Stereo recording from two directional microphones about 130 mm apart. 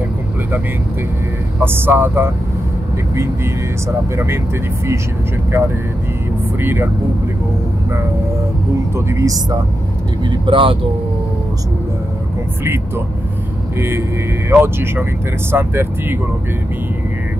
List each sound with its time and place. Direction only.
1.6 s speech: 15° right (ahead or behind)
6.6 s speech: 15° right (ahead or behind)
8.9 s speech: 25° right (ahead or behind)
10.3 s speech: 40° right (ahead or behind)
12.6 s speech: 20° right (ahead or behind)